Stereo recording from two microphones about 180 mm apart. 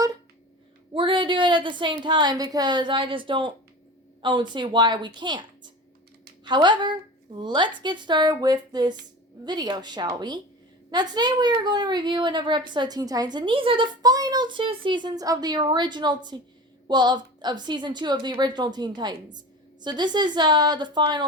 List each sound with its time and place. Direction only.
0.9 s a woman's voice: 25° right (ahead or behind)